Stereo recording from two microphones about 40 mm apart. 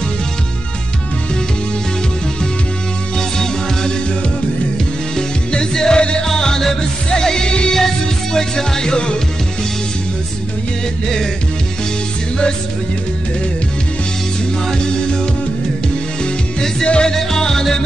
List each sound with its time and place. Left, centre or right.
3.2 s music: centre
5.1 s music: centre
14.7 s music: left
16.2 s music: left
17.1 s music: centre